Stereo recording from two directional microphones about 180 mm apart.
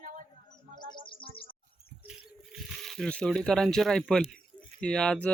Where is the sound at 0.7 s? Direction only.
25° left (ahead or behind).